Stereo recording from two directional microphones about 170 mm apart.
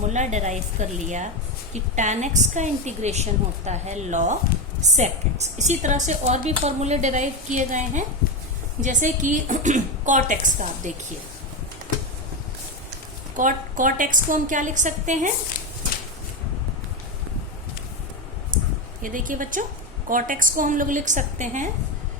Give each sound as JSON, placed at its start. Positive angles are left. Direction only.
{"t": 0.1, "sound": "a woman's voice", "side_deg": -45}
{"t": 13.3, "sound": "a woman's voice", "side_deg": -50}
{"t": 19.0, "sound": "a woman's voice", "side_deg": -50}